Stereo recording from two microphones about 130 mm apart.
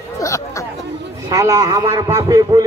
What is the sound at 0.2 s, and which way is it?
Chatter, 25° left (ahead or behind).